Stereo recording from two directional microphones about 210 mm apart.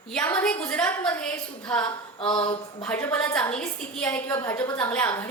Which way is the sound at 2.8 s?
10° left (ahead or behind).